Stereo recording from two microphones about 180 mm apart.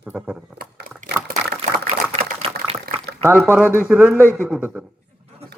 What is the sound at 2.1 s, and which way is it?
Typing, 30° right (ahead or behind).